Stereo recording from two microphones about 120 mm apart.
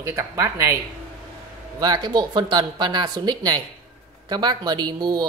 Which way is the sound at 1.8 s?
35° right (ahead or behind).